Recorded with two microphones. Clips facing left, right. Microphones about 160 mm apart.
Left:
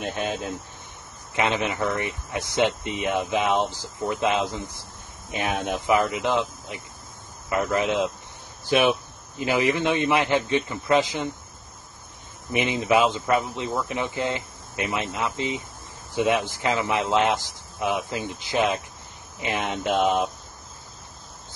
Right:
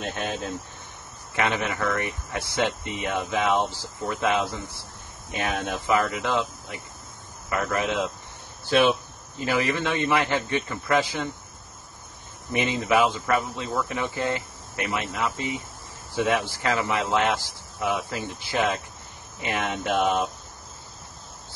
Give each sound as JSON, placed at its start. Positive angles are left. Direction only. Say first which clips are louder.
{"t": 0.0, "sound": "speech", "louder": "left 2 dB", "side_deg": 15}
{"t": 12.5, "sound": "speech", "louder": "left 1 dB", "side_deg": 20}